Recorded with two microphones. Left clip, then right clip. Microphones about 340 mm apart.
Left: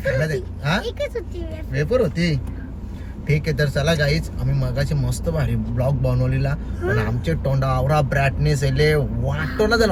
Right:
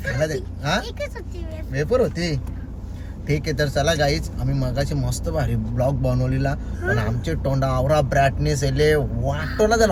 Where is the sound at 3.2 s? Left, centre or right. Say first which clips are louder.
Left 1 dB; centre.